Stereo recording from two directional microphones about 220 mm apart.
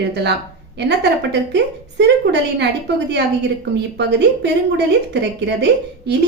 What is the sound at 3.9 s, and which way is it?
Speech, 50° right (ahead or behind).